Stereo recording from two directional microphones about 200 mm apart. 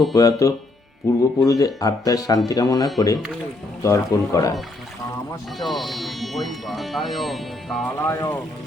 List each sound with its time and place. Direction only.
0.1 s speech: 15° left (ahead or behind)
5.5 s speech: centre (ahead or behind)
7.9 s speech: 15° left (ahead or behind)